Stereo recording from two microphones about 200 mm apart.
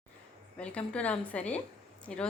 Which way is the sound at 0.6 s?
5° left (ahead or behind).